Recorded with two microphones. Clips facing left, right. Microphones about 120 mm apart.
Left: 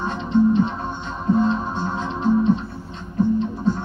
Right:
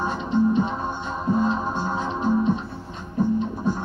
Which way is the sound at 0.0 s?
10° right (ahead or behind).